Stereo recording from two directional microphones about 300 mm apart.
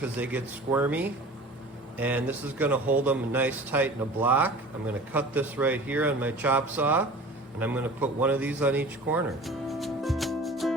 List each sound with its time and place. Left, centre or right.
0.0 s a man's voice: centre